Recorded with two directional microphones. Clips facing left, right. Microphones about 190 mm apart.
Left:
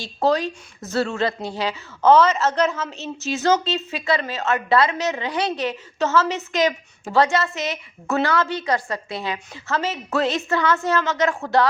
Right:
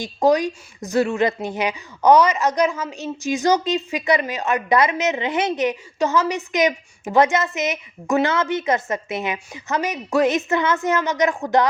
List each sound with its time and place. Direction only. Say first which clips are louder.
0.0 s speech: right 3 dB; 15° right (ahead or behind)